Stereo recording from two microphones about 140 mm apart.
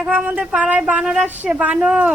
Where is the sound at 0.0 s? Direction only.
10° right (ahead or behind).